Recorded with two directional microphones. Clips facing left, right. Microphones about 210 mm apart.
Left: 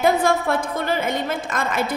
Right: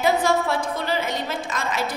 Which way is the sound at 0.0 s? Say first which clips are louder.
Left 2 dB; 55° left (ahead or behind).